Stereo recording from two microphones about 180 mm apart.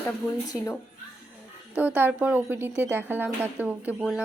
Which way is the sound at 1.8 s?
10° right (ahead or behind).